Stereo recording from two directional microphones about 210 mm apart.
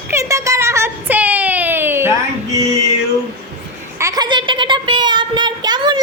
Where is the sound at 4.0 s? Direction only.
20° right (ahead or behind).